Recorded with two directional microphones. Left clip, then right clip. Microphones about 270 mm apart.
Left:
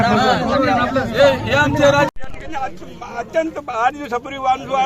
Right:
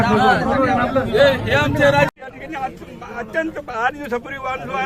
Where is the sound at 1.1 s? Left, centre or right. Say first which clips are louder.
Left 1 dB; centre.